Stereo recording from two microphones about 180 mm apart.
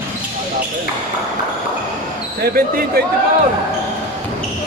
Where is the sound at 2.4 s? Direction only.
55° right (ahead or behind).